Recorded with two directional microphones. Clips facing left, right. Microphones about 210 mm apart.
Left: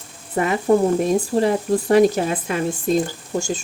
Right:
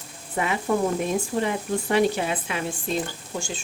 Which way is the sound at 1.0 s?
35° left (ahead or behind).